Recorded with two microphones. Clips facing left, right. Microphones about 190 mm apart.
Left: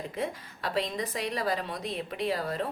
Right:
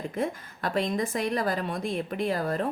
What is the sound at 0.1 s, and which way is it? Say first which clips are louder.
Speech: right 3 dB; 50° right (ahead or behind).